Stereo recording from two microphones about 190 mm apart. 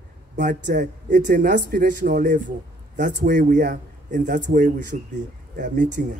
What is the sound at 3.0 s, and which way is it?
A man's voice, 55° right (ahead or behind).